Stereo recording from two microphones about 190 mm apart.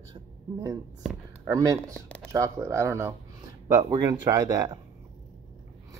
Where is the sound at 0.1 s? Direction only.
20° right (ahead or behind).